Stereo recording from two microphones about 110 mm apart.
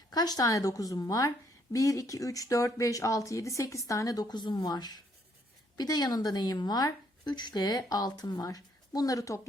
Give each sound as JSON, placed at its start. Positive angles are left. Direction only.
{"t": 0.1, "sound": "speech", "side_deg": 35}